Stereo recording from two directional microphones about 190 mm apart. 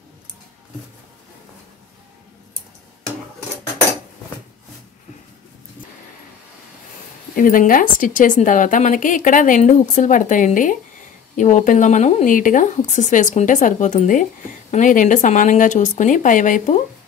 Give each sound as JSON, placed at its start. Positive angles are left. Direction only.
{"t": 7.3, "sound": "a woman's voice", "side_deg": 45}